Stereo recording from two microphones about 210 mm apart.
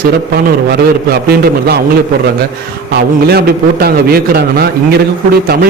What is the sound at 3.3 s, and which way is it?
A man's voice, 50° right (ahead or behind).